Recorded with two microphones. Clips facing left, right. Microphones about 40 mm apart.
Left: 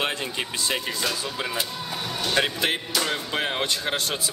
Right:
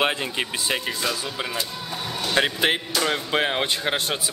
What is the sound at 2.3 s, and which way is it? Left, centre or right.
Speech, centre.